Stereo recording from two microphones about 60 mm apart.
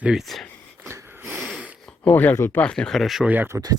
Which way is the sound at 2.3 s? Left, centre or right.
Left.